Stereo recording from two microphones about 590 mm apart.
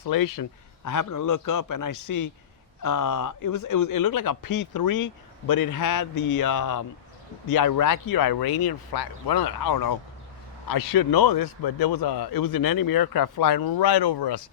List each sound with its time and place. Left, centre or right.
0.0 s a man's voice: left